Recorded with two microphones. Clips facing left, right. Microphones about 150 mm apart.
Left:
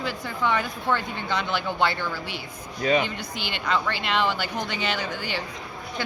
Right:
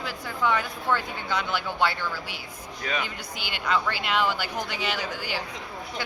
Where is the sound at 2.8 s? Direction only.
25° left (ahead or behind).